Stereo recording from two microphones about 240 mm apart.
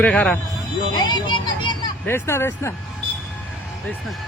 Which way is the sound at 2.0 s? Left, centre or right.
Centre.